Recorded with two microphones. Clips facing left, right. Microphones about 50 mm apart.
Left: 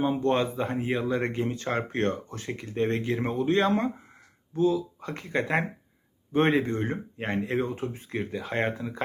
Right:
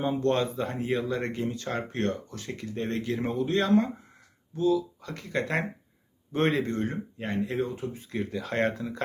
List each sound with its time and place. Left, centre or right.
0.0 s speech: centre
7.2 s speech: left
8.2 s speech: centre